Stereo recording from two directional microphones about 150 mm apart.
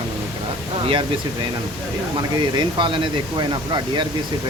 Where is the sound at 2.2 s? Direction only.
30° right (ahead or behind).